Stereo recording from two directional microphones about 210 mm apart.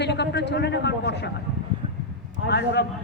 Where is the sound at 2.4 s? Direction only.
55° left (ahead or behind).